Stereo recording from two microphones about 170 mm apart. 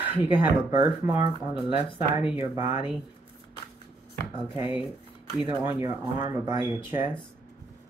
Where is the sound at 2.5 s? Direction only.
15° right (ahead or behind).